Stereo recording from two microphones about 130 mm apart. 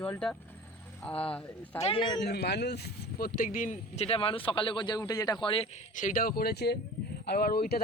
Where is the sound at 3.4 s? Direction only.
90° left; by 5.7 s 40° left (ahead or behind).